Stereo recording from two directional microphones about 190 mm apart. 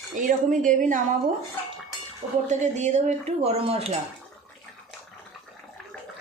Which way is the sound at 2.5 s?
40° right (ahead or behind).